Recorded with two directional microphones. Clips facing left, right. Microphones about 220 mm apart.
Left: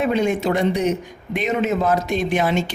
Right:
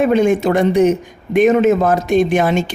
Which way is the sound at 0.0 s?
50° right (ahead or behind).